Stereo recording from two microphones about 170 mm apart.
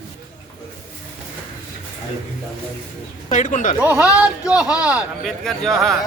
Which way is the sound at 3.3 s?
45° left (ahead or behind).